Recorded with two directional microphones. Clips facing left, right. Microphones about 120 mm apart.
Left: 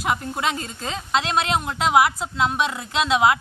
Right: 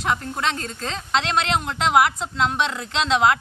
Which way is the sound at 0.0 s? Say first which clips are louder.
Even; 5° left (ahead or behind).